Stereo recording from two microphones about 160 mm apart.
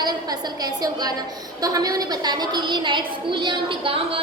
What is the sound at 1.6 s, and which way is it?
A woman's voice, 20° right (ahead or behind).